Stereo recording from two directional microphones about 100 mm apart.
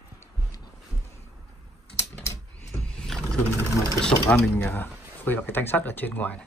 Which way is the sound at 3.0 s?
5° left (ahead or behind).